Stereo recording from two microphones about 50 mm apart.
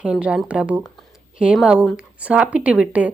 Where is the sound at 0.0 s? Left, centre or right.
Right.